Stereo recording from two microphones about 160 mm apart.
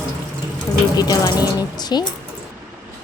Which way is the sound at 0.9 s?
25° left (ahead or behind).